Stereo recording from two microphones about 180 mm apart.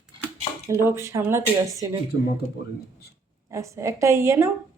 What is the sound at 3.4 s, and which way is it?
Speech, 15° right (ahead or behind).